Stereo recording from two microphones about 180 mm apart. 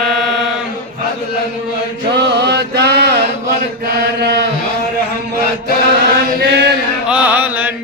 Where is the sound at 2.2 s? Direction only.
65° right (ahead or behind).